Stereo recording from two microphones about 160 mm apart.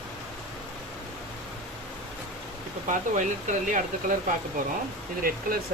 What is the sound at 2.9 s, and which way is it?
Speech, 55° right (ahead or behind).